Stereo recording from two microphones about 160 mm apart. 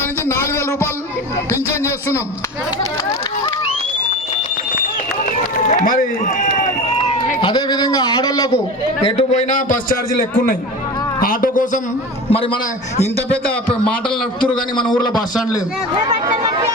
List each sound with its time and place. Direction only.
0.3 s a sound: 15° left (ahead or behind)
1.5 s speech: 15° left (ahead or behind)
5.6 s a man's voice: 55° left (ahead or behind)
7.4 s speech: 30° left (ahead or behind)
9.0 s a man's voice: 45° left (ahead or behind)
12.3 s a man's voice: 35° left (ahead or behind)
14.8 s speech: 30° left (ahead or behind)